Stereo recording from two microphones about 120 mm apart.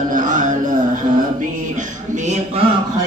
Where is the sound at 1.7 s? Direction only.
90° right.